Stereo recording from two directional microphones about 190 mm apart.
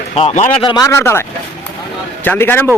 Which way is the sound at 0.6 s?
20° left (ahead or behind).